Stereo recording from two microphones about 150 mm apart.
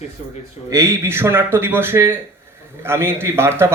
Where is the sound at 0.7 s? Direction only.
20° right (ahead or behind).